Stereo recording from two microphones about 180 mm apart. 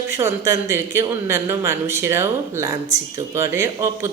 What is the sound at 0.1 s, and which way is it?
Speech, 15° right (ahead or behind).